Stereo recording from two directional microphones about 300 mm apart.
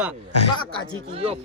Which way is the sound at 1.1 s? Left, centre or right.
Centre.